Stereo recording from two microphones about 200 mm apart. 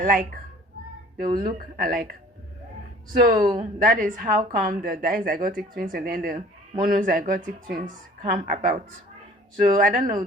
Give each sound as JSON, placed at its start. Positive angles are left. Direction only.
{"t": 0.0, "sound": "speech", "side_deg": -45}
{"t": 1.4, "sound": "speech", "side_deg": -45}
{"t": 3.3, "sound": "speech", "side_deg": -20}
{"t": 3.6, "sound": "speech", "side_deg": -40}